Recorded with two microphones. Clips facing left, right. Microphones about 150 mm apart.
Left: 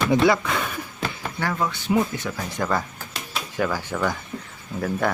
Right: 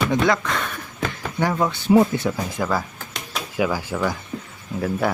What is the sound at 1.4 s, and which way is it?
Speech, 15° right (ahead or behind).